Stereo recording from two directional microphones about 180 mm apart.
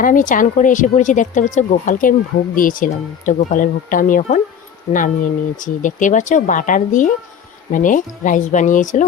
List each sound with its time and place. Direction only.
0.0 s speech: 45° left (ahead or behind)